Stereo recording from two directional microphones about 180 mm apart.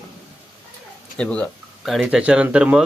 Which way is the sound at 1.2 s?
5° left (ahead or behind).